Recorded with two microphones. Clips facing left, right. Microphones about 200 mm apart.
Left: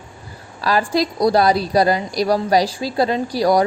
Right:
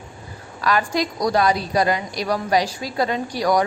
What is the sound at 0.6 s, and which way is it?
A woman's voice, 30° left (ahead or behind).